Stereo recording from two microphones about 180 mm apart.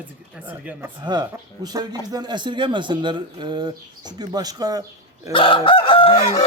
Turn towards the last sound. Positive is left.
turn(degrees=30)  # may be behind; listen again after turning